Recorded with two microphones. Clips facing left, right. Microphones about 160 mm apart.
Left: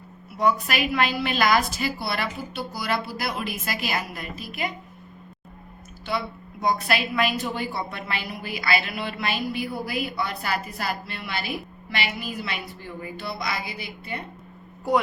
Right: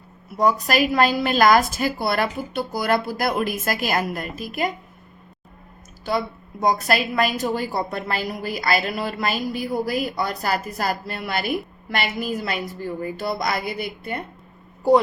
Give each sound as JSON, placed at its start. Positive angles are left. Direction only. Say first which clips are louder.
{"t": 0.3, "sound": "a woman's voice", "louder": "right 4 dB", "side_deg": -40}
{"t": 6.1, "sound": "a woman's voice", "louder": "right 5 dB", "side_deg": -45}